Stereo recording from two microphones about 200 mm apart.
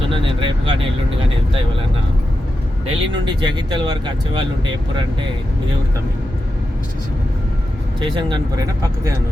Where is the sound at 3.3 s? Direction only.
20° right (ahead or behind).